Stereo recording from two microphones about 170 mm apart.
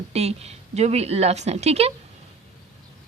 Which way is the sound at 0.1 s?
40° right (ahead or behind).